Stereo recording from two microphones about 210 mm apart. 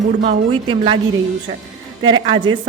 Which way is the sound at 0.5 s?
25° right (ahead or behind).